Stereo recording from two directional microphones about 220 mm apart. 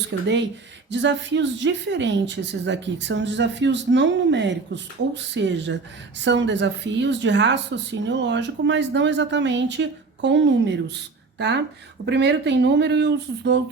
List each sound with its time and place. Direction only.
0.1 s a woman's voice: 60° right (ahead or behind)